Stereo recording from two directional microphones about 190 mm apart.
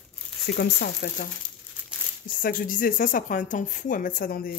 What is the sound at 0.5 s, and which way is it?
Speech, 60° left (ahead or behind).